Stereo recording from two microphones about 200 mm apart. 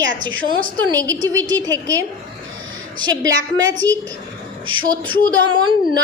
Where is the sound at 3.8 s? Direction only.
20° right (ahead or behind).